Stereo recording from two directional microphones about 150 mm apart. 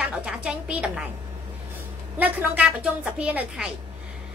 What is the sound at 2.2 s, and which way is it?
A woman's voice, 10° right (ahead or behind).